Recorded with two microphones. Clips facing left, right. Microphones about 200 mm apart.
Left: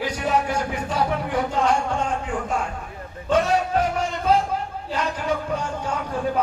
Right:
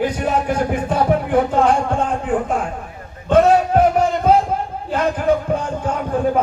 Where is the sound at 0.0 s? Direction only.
50° right (ahead or behind).